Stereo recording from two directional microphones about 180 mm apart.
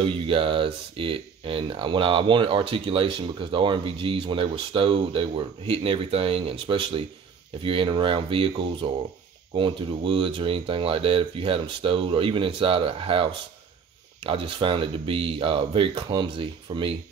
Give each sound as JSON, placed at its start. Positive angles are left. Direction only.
{"t": 0.0, "sound": "speech", "side_deg": -30}